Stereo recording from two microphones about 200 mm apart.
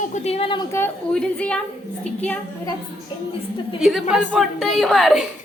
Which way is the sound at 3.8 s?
Centre (ahead or behind).